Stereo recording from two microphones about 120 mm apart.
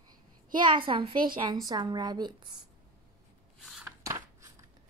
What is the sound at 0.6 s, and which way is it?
A child's voice, 45° right (ahead or behind).